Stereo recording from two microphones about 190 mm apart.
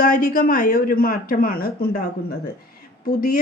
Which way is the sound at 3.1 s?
50° left (ahead or behind).